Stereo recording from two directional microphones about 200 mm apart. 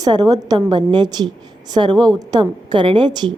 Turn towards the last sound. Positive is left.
turn(degrees=-20)  # may be behind; listen again after turning